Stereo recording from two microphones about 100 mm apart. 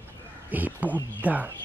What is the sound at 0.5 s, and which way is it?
Speech, 15° right (ahead or behind).